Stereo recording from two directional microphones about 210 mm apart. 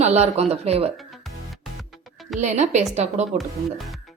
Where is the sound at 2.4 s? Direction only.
35° right (ahead or behind).